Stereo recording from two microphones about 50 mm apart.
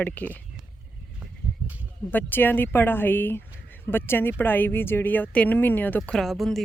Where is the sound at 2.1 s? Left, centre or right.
Left.